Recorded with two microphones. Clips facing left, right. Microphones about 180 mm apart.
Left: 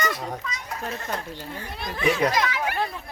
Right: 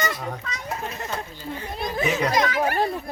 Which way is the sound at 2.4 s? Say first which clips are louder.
Right 4 dB; 45° right (ahead or behind).